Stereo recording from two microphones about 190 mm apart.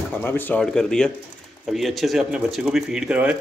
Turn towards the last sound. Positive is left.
turn(degrees=-5)  # may be behind; listen again after turning